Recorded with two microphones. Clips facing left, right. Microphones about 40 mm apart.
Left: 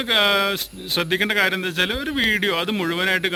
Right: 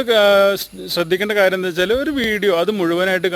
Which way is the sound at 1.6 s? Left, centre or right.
Left.